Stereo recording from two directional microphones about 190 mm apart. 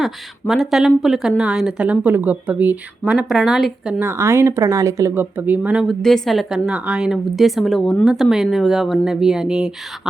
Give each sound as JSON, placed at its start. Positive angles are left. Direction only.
{"t": 0.0, "sound": "speech", "side_deg": 0}
{"t": 4.0, "sound": "speech", "side_deg": -15}